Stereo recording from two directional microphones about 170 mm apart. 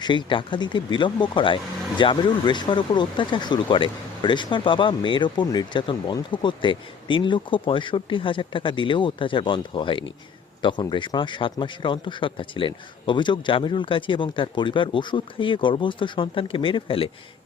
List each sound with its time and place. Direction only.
0.0 s speech: 25° left (ahead or behind)